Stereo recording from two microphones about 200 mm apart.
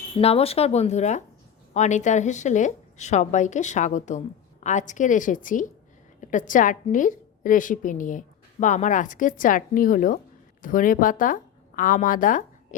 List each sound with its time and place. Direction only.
0.2 s a woman's voice: 30° left (ahead or behind)